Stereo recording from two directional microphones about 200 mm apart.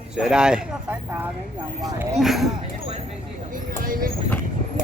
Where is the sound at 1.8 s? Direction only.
20° right (ahead or behind).